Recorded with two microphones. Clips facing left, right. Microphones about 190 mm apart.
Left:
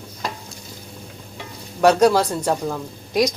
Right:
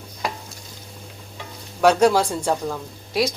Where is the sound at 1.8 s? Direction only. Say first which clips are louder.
Left 1 dB; 10° right (ahead or behind).